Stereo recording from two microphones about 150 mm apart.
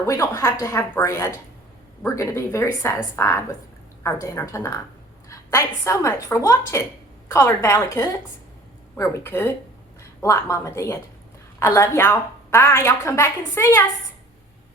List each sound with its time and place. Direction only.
0.0 s a woman's voice: 20° left (ahead or behind)